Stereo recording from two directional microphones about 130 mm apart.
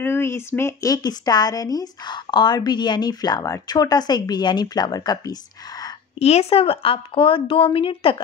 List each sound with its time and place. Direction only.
0.0 s speech: 20° left (ahead or behind)
6.1 s speech: 55° left (ahead or behind)